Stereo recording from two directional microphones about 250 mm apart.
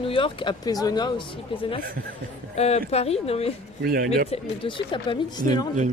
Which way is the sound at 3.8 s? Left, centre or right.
Right.